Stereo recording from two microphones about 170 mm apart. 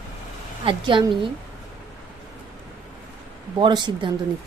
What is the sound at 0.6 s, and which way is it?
Speech, 30° right (ahead or behind).